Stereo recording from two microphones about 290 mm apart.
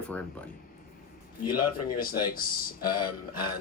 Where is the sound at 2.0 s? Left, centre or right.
Left.